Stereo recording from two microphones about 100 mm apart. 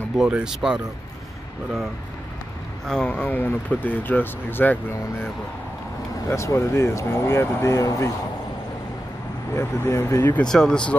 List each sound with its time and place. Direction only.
0.1 s speech: 5° right (ahead or behind)
2.9 s speech: 10° left (ahead or behind); by 8.1 s 30° left (ahead or behind)
9.6 s speech: 25° left (ahead or behind)
10.3 s speech: 5° left (ahead or behind)